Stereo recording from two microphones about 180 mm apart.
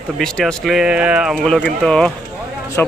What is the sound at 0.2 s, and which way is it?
Speech, 5° left (ahead or behind).